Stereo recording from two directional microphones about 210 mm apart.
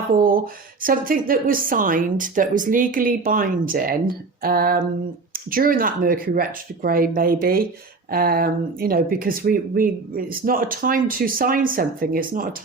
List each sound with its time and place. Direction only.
0.2 s a woman's voice: 45° right (ahead or behind)